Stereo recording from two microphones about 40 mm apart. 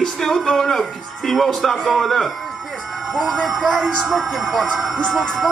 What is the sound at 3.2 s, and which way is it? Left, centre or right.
Speech, right.